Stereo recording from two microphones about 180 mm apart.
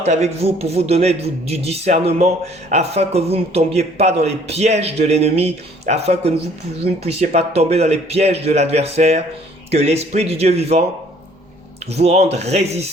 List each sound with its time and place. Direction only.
0.0 s a man's voice: 40° right (ahead or behind)
11.9 s a man's voice: 35° right (ahead or behind)